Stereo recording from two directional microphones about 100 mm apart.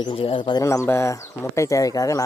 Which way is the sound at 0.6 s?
30° left (ahead or behind).